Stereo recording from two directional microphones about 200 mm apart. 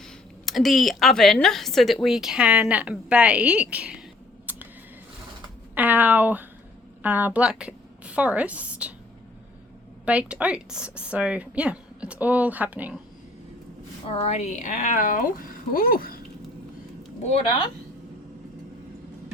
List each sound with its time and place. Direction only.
0.0 s a woman's voice: centre (ahead or behind)
4.5 s a sound: 10° right (ahead or behind)
5.7 s a woman's voice: 10° right (ahead or behind)
10.1 s speech: 5° right (ahead or behind)
14.1 s speech: 30° left (ahead or behind)
17.2 s speech: 30° left (ahead or behind)